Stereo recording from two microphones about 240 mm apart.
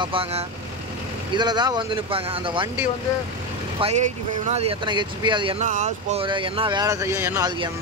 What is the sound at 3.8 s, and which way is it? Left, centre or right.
Speech, right.